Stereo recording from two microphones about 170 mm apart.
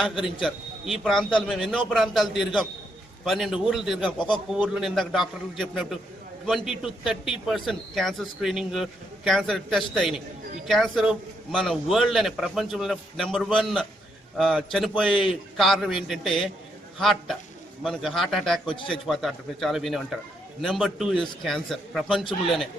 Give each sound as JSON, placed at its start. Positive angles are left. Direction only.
{"t": 0.0, "sound": "a man's voice", "side_deg": 0}
{"t": 18.7, "sound": "speech", "side_deg": 30}
{"t": 19.0, "sound": "a man's voice", "side_deg": 0}